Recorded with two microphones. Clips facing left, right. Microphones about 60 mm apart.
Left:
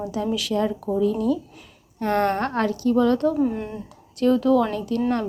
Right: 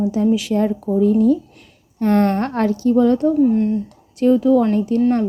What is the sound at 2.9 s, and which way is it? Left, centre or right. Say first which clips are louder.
Speech: right 4 dB; right.